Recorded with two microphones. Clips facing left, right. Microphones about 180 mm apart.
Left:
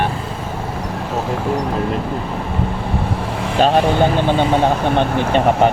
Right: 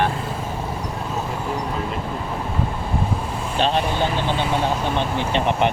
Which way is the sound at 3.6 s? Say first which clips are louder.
Left 7 dB; 50° left (ahead or behind).